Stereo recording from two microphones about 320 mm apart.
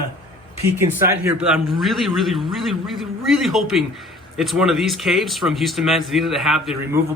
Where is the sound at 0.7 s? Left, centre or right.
Centre.